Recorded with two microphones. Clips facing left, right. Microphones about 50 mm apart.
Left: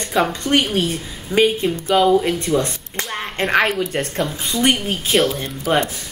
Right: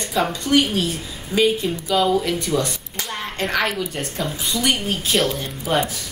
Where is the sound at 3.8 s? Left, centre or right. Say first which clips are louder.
Left 4 dB; left.